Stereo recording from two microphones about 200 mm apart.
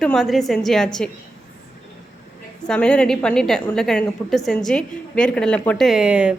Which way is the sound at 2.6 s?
5° left (ahead or behind).